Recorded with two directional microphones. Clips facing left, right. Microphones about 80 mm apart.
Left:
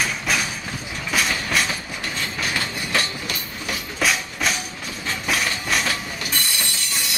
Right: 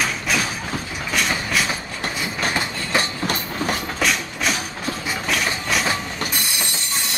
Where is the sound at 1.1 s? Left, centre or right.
Centre.